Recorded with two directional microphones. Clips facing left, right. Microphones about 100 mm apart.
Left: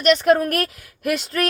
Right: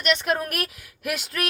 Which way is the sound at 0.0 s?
40° left (ahead or behind).